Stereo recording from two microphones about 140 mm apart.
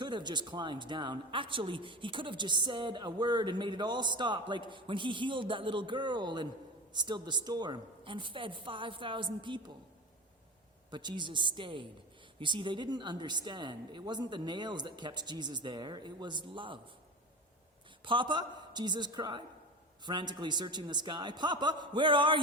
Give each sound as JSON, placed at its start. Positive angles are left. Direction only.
{"t": 0.0, "sound": "a man's voice", "side_deg": -35}
{"t": 10.9, "sound": "a man's voice", "side_deg": -30}
{"t": 18.0, "sound": "a man's voice", "side_deg": -35}